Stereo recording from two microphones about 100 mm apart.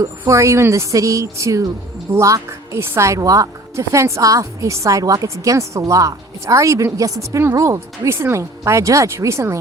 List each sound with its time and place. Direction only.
0.0 s a woman's voice: 30° right (ahead or behind)